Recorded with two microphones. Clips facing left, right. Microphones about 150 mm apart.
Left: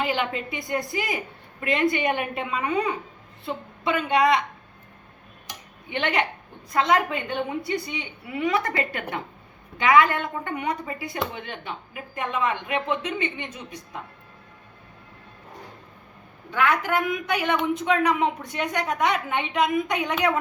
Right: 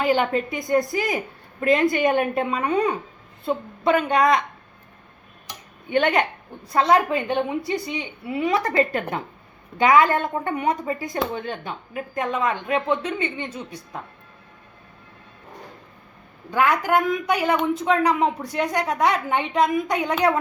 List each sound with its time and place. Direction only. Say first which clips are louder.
0.0 s a woman's voice: right 6 dB; 45° right (ahead or behind)
5.9 s a woman's voice: right 5 dB; 45° right (ahead or behind)
16.8 s a woman's voice: right 4 dB; 40° right (ahead or behind)